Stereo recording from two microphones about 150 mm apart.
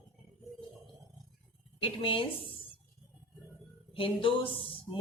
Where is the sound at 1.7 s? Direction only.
35° left (ahead or behind).